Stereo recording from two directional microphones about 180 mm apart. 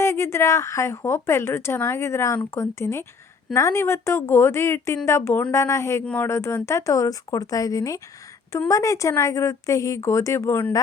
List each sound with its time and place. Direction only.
0.0 s speech: 15° left (ahead or behind)